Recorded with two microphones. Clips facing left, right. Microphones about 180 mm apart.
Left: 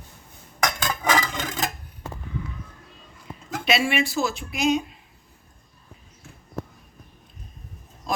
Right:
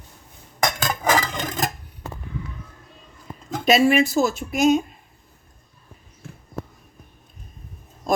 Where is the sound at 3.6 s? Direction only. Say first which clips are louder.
Right 7 dB; 40° right (ahead or behind).